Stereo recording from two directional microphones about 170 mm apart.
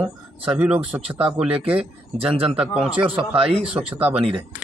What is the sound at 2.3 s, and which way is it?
A man's voice, 35° right (ahead or behind).